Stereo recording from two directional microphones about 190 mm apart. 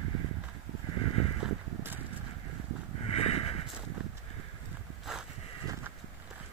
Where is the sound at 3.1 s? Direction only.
30° left (ahead or behind).